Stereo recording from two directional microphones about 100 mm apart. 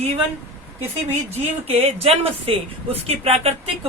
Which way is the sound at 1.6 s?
90° right.